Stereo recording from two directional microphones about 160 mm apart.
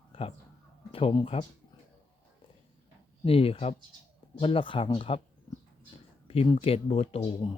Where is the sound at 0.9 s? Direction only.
35° left (ahead or behind).